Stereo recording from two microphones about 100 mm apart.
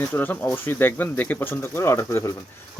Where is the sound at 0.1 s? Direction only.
15° left (ahead or behind).